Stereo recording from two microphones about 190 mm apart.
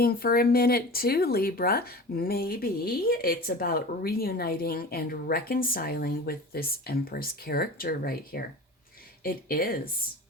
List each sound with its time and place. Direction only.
0.0 s speech: 50° left (ahead or behind)